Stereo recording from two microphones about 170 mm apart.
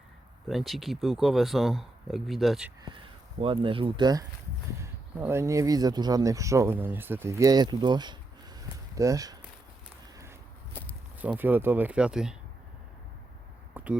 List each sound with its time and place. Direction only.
0.4 s speech: centre (ahead or behind)
3.4 s speech: 30° right (ahead or behind)
10.8 s walk: 10° left (ahead or behind)
11.2 s speech: 10° right (ahead or behind)
13.7 s a sound: 10° right (ahead or behind)